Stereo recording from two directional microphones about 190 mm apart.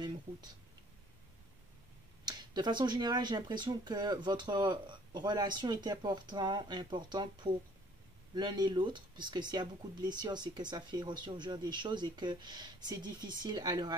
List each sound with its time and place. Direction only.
2.2 s speech: 20° right (ahead or behind)